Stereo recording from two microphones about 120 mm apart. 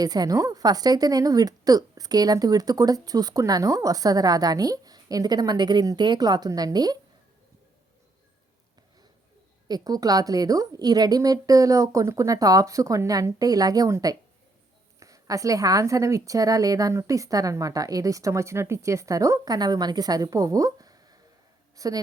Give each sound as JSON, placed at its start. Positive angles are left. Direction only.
{"t": 0.0, "sound": "a woman's voice", "side_deg": -35}
{"t": 9.6, "sound": "a woman's voice", "side_deg": -35}